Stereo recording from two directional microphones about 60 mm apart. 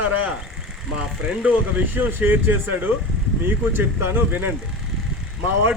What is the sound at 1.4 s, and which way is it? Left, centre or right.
Speech, right.